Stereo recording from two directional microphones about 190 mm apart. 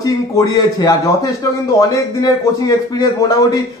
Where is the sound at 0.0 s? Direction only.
20° left (ahead or behind).